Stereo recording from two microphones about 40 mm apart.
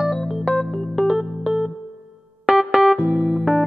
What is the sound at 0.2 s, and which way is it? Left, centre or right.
Keyboard, centre.